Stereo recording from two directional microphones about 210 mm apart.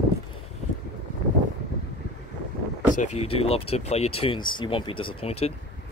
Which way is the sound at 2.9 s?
35° left (ahead or behind).